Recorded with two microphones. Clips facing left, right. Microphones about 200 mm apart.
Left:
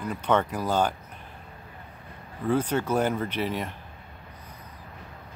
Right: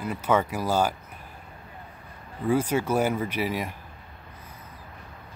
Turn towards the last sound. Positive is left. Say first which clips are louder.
# right 1 dB
turn(degrees=-10)  # may be behind; listen again after turning